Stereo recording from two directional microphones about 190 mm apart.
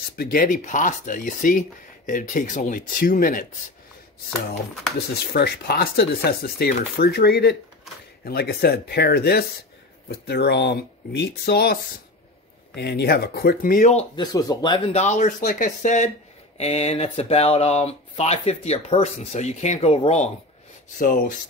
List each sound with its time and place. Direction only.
0.1 s speech: 50° left (ahead or behind)
5.3 s speech: 55° left (ahead or behind); by 14.0 s 40° left (ahead or behind)
14.1 s speech: 20° left (ahead or behind)
21.0 s speech: 45° left (ahead or behind)